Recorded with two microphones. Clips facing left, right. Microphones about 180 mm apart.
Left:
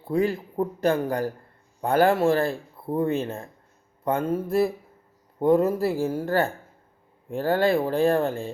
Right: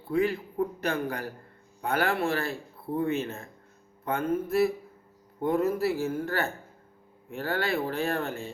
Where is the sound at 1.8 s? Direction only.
50° left (ahead or behind).